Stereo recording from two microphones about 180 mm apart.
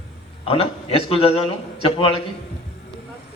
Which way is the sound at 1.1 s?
30° left (ahead or behind).